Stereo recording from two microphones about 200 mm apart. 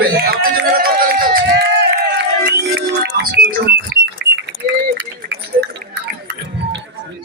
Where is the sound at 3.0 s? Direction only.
65° right (ahead or behind).